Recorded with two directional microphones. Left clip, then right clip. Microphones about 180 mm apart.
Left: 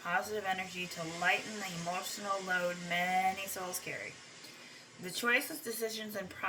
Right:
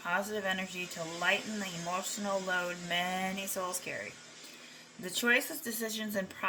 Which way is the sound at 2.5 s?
40° right (ahead or behind).